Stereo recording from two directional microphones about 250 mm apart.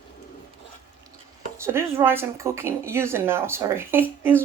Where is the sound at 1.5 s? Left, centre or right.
Centre.